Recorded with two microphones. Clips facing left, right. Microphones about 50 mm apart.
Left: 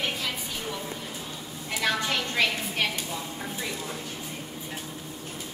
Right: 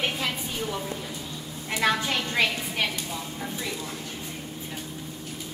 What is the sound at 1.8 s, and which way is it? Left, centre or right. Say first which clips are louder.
A woman's voice: right 2 dB; centre.